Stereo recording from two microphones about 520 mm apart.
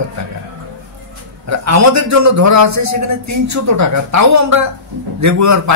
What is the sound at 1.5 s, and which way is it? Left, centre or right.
A man's voice, right.